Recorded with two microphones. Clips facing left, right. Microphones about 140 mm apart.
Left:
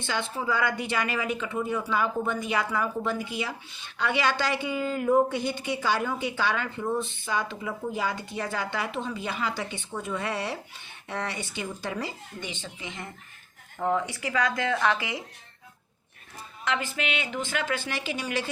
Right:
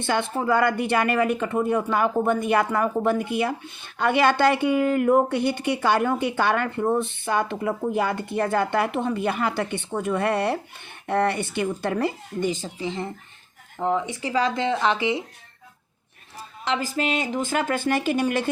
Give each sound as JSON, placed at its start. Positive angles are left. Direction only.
{"t": 0.0, "sound": "speech", "side_deg": -55}
{"t": 12.5, "sound": "speech", "side_deg": -40}
{"t": 13.7, "sound": "speech", "side_deg": -15}
{"t": 16.6, "sound": "speech", "side_deg": -35}